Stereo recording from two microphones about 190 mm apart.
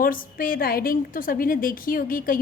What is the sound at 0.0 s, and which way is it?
A woman's voice, 50° left (ahead or behind).